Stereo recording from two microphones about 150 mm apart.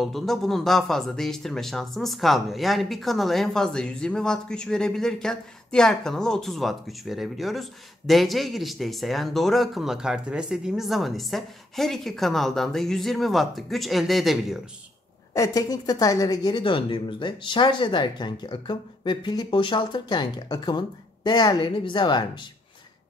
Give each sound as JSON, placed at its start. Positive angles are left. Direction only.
{"t": 0.0, "sound": "speech", "side_deg": 0}
{"t": 15.3, "sound": "a woman's voice", "side_deg": 25}